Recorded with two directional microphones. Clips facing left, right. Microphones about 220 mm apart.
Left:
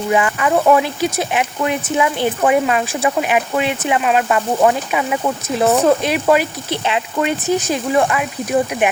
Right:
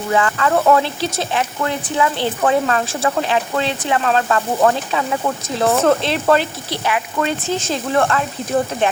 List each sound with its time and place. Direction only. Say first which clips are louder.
0.1 s speech: left 1 dB; 15° left (ahead or behind)